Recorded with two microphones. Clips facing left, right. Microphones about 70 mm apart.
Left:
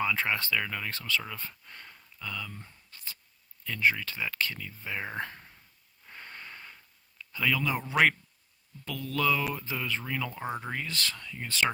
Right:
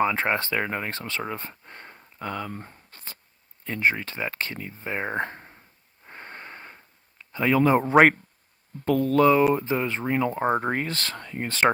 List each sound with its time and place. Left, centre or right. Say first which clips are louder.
0.0 s speech: right 6 dB; right
6.1 s a sound: right 5 dB; right
7.9 s speech: right 5 dB; right